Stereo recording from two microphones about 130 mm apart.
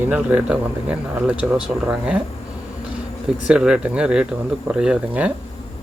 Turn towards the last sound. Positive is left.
turn(degrees=-10)  # may be behind; listen again after turning